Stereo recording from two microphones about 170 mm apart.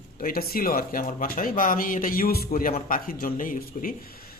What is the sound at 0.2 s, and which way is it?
Speech, 60° left (ahead or behind).